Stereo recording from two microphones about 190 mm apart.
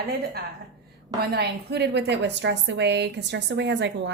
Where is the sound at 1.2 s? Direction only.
60° right (ahead or behind).